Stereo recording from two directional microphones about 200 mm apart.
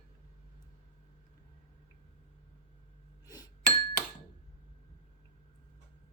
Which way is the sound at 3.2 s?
20° left (ahead or behind).